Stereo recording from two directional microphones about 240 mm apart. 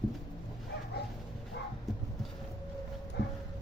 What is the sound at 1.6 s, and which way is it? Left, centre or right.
Bow-wow, left.